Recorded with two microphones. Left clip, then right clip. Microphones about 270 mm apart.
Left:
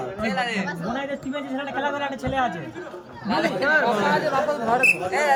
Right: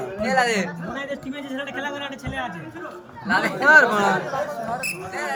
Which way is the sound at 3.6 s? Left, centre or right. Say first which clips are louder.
Right 7 dB; right.